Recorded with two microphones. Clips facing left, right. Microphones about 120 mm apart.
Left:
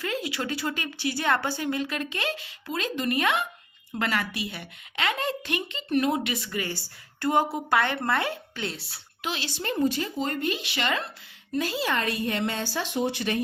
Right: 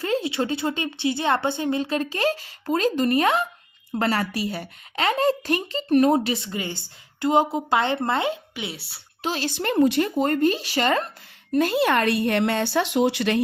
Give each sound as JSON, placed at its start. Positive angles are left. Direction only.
{"t": 0.0, "sound": "a woman's voice", "side_deg": -30}
{"t": 8.7, "sound": "a woman's voice", "side_deg": -5}
{"t": 9.2, "sound": "a woman's voice", "side_deg": -40}
{"t": 9.6, "sound": "speech", "side_deg": -65}
{"t": 11.5, "sound": "speech", "side_deg": -55}